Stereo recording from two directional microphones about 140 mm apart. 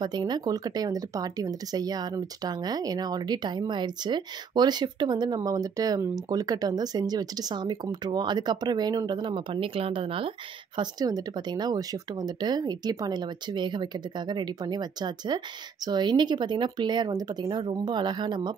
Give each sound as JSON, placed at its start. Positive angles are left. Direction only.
{"t": 0.0, "sound": "speech", "side_deg": -30}
{"t": 10.8, "sound": "speech", "side_deg": -25}